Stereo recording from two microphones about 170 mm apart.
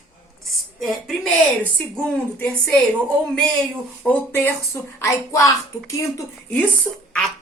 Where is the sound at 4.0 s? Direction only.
10° left (ahead or behind).